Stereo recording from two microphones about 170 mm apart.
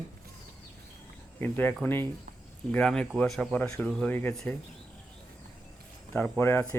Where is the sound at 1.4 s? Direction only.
10° left (ahead or behind).